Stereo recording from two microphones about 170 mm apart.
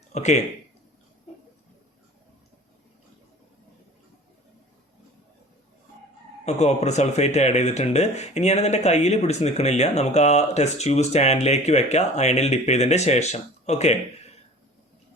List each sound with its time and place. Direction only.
0.1 s speech: 40° left (ahead or behind)
6.4 s speech: 40° left (ahead or behind)